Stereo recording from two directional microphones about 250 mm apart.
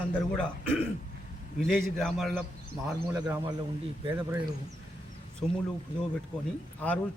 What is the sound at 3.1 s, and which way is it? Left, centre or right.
Speech, centre.